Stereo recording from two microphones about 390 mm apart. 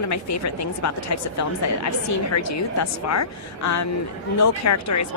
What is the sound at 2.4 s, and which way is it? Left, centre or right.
A woman's voice, left.